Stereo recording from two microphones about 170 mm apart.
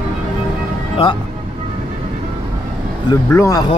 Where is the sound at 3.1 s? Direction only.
20° left (ahead or behind).